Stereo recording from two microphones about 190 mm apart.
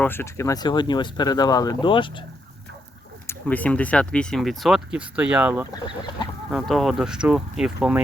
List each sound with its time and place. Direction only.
0.0 s speech: 10° left (ahead or behind)
3.2 s speech: 10° left (ahead or behind); by 5.6 s 10° right (ahead or behind)
5.8 s speech: 25° left (ahead or behind)
6.5 s speech: centre (ahead or behind)